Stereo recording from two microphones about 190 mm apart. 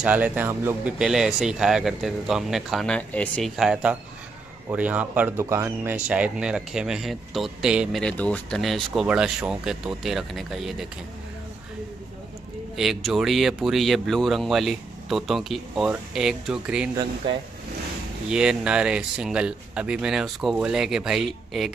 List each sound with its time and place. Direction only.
0.0 s speech: 10° right (ahead or behind)
12.7 s speech: centre (ahead or behind)
16.9 s speech: 20° right (ahead or behind)
18.3 s speech: 5° right (ahead or behind)